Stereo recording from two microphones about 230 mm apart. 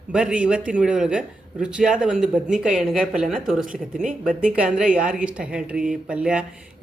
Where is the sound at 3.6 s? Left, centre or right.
Right.